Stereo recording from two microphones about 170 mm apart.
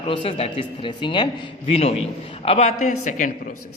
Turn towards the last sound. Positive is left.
turn(degrees=45)  # may be behind; listen again after turning